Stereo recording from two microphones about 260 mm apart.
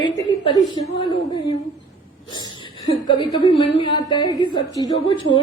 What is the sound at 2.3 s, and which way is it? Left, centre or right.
A woman's voice, centre.